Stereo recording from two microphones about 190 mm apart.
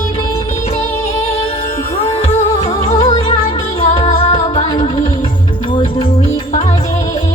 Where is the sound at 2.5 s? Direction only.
20° left (ahead or behind).